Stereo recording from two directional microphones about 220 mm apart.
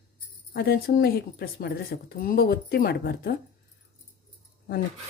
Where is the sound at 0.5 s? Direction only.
45° left (ahead or behind).